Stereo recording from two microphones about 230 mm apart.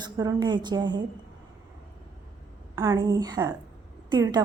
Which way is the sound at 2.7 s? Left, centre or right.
Centre.